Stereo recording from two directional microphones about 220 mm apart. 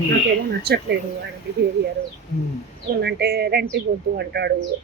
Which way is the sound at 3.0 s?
45° right (ahead or behind).